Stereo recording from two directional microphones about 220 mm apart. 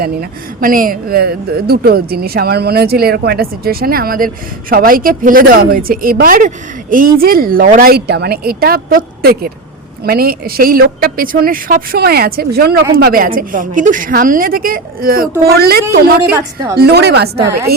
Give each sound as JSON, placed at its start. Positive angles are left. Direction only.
{"t": 0.0, "sound": "a woman's voice", "side_deg": -40}